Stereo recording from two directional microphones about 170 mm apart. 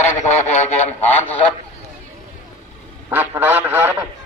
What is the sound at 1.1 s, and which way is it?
Speech, 10° left (ahead or behind).